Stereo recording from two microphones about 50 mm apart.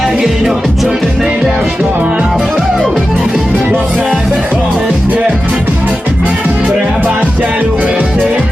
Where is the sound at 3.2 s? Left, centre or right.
Centre.